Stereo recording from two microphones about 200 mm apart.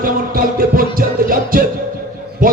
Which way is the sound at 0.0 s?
45° right (ahead or behind).